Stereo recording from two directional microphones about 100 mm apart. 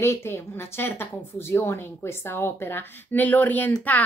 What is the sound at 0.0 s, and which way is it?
A child's voice, 25° left (ahead or behind).